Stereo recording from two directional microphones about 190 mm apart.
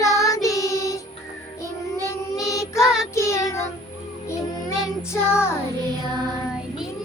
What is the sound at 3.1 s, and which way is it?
Child singing, 15° left (ahead or behind).